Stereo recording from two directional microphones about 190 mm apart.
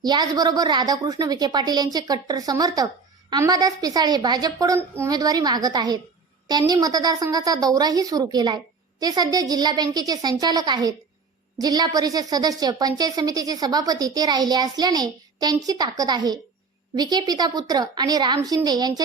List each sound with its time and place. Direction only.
0.0 s a woman's voice: 20° right (ahead or behind)